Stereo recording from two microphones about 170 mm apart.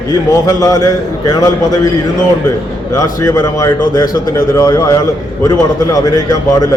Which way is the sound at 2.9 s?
20° left (ahead or behind).